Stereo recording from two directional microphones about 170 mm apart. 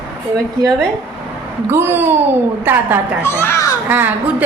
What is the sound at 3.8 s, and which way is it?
Speech, 10° right (ahead or behind).